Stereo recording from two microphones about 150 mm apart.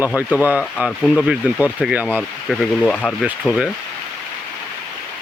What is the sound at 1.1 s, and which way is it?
Speech, 5° right (ahead or behind).